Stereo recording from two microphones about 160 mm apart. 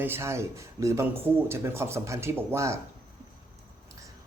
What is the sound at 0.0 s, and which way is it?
Speech, 15° right (ahead or behind).